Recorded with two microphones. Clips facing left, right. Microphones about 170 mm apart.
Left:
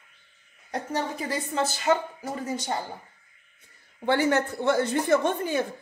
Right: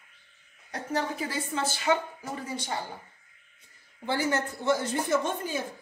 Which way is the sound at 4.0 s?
65° left (ahead or behind).